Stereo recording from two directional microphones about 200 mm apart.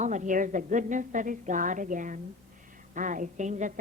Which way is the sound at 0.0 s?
40° right (ahead or behind).